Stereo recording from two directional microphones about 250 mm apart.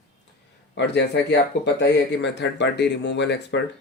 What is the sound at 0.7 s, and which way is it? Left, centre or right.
Speech, left.